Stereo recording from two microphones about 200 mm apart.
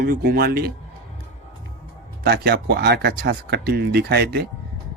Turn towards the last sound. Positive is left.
turn(degrees=-55)  # may be behind; listen again after turning